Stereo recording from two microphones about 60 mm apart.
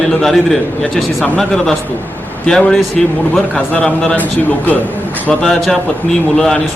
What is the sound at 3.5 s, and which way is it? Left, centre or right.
Speech, left.